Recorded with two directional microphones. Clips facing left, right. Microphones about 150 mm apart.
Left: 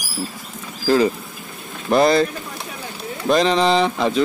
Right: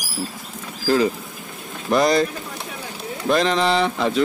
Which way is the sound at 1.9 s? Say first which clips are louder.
Left 2 dB; 30° left (ahead or behind).